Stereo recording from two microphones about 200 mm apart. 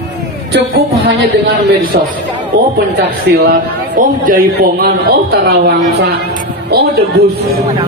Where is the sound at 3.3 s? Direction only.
45° right (ahead or behind).